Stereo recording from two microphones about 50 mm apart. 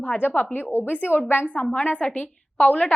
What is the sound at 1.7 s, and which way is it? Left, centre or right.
A woman's voice, left.